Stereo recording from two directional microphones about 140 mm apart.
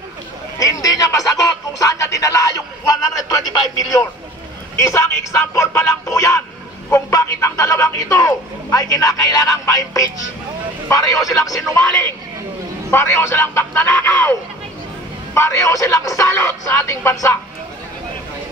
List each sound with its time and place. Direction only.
0.6 s speech: 25° left (ahead or behind)
12.9 s speech: 15° left (ahead or behind)
15.3 s speech: 20° left (ahead or behind)